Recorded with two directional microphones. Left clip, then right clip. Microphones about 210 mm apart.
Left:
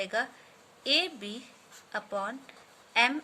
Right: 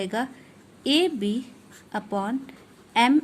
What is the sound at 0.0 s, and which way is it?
Speech, 20° right (ahead or behind).